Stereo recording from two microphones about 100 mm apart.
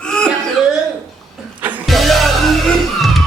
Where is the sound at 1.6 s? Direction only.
15° right (ahead or behind).